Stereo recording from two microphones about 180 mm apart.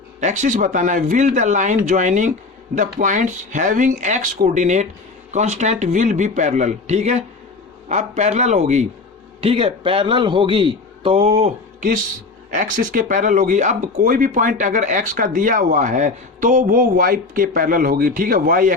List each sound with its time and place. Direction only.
0.2 s a man's voice: 40° right (ahead or behind)